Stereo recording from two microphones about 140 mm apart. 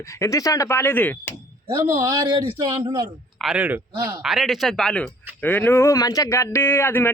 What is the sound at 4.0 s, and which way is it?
Speech, 25° right (ahead or behind).